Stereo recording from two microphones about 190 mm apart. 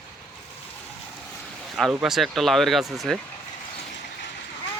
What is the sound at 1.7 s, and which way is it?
Speech, centre (ahead or behind).